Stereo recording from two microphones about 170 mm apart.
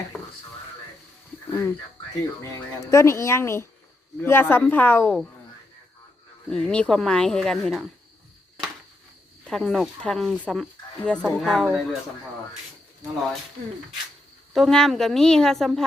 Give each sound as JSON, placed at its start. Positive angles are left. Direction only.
{"t": 1.5, "sound": "a sound", "side_deg": 15}
{"t": 2.4, "sound": "speech", "side_deg": 15}
{"t": 6.5, "sound": "speech", "side_deg": 5}
{"t": 9.5, "sound": "speech", "side_deg": 0}
{"t": 14.5, "sound": "speech", "side_deg": 0}